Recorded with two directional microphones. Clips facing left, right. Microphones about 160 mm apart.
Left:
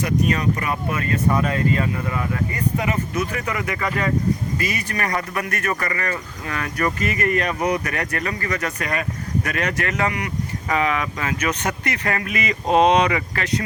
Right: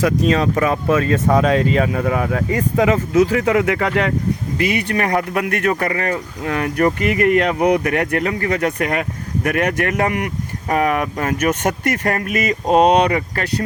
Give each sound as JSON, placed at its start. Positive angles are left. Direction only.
{"t": 0.0, "sound": "speech", "side_deg": -90}